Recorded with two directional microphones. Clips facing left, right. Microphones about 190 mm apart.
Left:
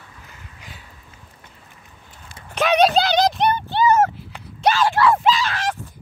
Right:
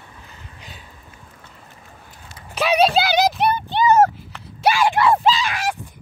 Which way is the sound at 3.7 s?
15° right (ahead or behind).